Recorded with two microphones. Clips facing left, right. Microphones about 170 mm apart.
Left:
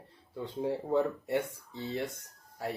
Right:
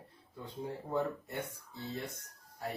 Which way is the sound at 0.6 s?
90° left.